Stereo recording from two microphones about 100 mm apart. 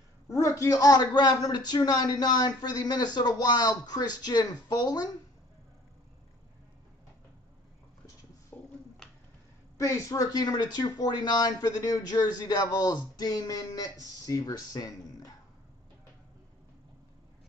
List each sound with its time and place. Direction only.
0.3 s a man's voice: 30° left (ahead or behind)
8.5 s a sound: 15° left (ahead or behind)
9.8 s speech: 35° left (ahead or behind)